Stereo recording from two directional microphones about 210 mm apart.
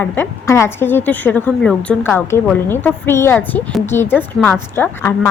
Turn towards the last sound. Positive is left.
turn(degrees=10)  # may be behind; listen again after turning